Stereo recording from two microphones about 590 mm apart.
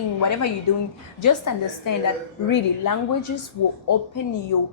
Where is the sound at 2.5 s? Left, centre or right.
Left.